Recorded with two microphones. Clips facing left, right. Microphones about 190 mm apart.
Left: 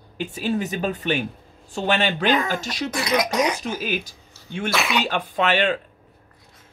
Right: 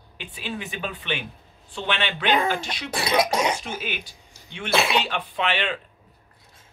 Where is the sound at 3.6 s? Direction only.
40° left (ahead or behind).